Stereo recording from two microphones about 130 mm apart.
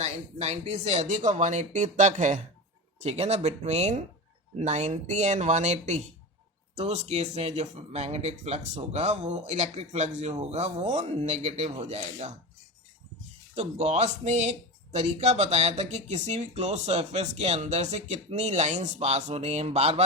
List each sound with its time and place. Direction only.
0.0 s speech: 55° right (ahead or behind)
3.0 s speech: 55° right (ahead or behind)
13.6 s speech: 55° right (ahead or behind)